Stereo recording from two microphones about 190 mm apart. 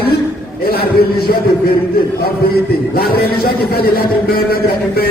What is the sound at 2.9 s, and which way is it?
A man's voice, 50° left (ahead or behind).